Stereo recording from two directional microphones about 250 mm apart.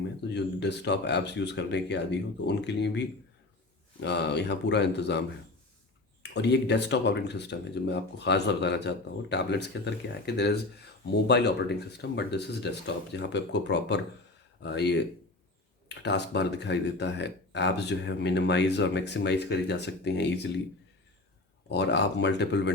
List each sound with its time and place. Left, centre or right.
0.3 s speech: left
6.3 s speech: left
21.7 s speech: left